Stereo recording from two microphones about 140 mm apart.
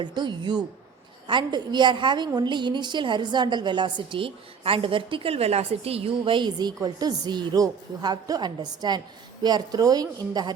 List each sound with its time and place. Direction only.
0.0 s a woman's voice: 35° right (ahead or behind)